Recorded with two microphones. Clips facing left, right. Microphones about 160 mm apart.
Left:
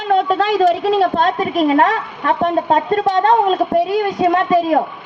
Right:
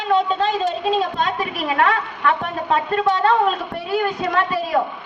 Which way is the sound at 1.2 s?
45° left (ahead or behind).